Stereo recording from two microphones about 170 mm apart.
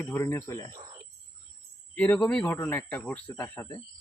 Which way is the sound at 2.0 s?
5° left (ahead or behind).